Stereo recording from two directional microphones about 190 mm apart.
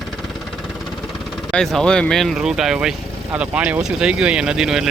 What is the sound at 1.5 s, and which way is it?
Speech, 5° left (ahead or behind).